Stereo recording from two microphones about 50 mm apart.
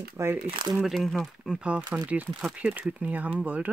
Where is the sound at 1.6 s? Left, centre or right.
Centre.